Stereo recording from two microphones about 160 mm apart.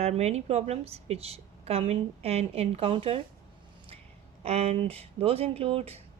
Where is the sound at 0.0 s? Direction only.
40° right (ahead or behind).